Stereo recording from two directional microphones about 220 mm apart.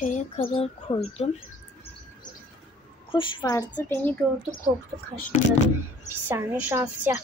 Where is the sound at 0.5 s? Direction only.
20° left (ahead or behind).